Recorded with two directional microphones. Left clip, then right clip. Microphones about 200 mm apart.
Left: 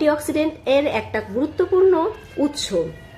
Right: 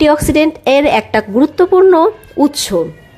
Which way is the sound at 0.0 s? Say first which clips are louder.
Right 9 dB; 40° right (ahead or behind).